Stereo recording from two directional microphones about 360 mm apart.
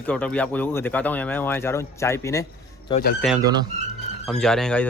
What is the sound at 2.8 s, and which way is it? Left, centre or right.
Speech, left.